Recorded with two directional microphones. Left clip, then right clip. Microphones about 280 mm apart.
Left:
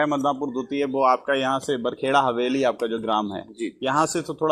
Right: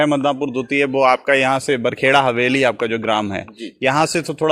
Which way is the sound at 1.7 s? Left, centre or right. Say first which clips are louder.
Right 7 dB; right.